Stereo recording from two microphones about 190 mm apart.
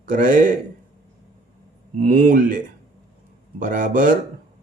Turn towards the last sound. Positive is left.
turn(degrees=-45)  # may be behind; listen again after turning